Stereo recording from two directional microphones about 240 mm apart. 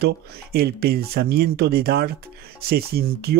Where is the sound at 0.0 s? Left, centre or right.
Right.